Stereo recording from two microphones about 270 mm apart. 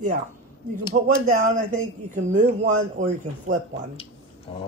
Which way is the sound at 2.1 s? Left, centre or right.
Right.